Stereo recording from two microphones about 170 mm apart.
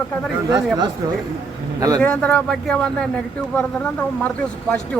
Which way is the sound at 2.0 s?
5° left (ahead or behind).